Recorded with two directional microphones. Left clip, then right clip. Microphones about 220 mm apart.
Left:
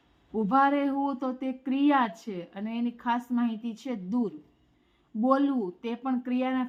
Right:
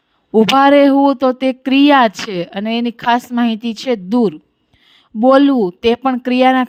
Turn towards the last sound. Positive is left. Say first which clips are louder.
# right 18 dB
turn(degrees=-45)  # may be behind; listen again after turning